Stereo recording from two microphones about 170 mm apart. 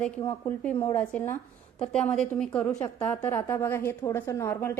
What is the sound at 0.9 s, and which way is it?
A woman's voice, 10° left (ahead or behind).